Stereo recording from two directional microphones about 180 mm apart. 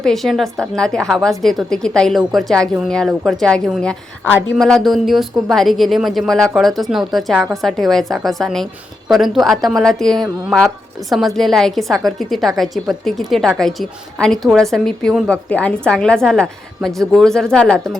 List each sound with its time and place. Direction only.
0.0 s a woman's voice: centre (ahead or behind)